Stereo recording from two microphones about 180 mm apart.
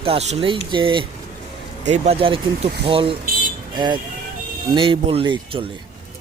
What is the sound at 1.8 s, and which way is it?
Speech, 40° right (ahead or behind).